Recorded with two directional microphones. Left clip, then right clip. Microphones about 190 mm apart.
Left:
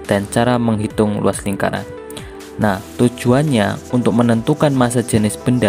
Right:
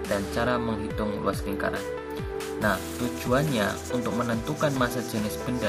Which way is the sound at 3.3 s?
50° left (ahead or behind).